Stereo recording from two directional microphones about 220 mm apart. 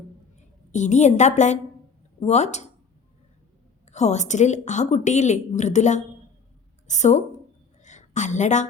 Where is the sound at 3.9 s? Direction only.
30° left (ahead or behind).